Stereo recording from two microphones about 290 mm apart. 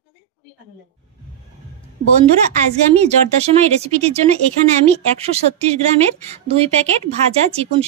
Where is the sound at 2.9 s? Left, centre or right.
Right.